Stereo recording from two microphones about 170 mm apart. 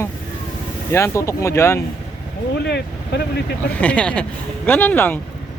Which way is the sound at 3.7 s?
10° left (ahead or behind).